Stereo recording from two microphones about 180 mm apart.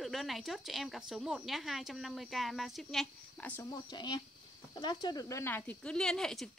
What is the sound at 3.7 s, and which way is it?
Speech, 25° left (ahead or behind).